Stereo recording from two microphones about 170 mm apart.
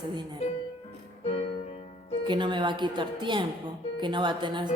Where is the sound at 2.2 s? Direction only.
25° right (ahead or behind).